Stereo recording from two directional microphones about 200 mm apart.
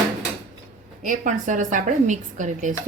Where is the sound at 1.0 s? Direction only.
40° right (ahead or behind).